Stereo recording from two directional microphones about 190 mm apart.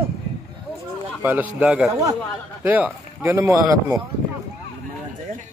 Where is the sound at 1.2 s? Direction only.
10° right (ahead or behind).